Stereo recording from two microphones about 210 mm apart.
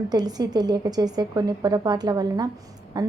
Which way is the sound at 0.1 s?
20° right (ahead or behind).